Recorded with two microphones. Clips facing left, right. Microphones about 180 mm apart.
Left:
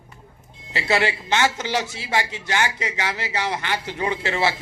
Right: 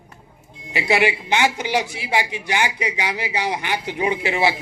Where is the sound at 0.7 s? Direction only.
15° right (ahead or behind).